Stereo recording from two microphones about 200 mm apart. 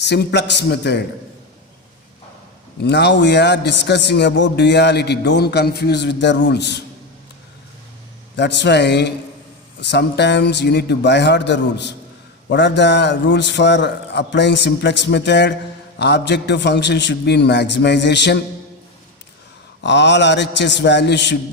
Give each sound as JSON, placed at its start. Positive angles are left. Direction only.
{"t": 0.0, "sound": "a man's voice", "side_deg": 60}
{"t": 2.8, "sound": "a man's voice", "side_deg": 60}
{"t": 8.4, "sound": "a man's voice", "side_deg": 60}
{"t": 19.8, "sound": "a man's voice", "side_deg": 60}